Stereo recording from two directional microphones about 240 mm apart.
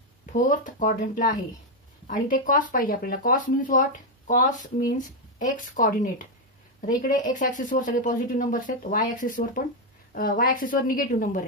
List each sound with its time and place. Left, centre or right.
0.3 s speech: left